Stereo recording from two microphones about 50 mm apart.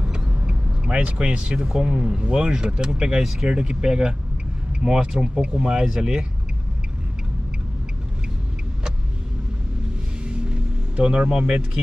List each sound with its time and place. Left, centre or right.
0.0 s vehicle: centre
1.8 s speech: centre
10.2 s music: centre